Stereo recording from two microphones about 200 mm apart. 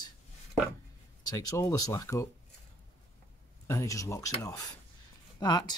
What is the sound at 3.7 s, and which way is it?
Speech, 15° left (ahead or behind).